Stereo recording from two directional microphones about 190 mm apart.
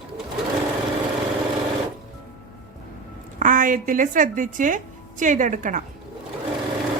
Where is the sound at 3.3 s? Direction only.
45° right (ahead or behind).